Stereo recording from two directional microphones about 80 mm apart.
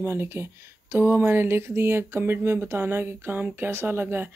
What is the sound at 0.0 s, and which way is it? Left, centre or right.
Speech, right.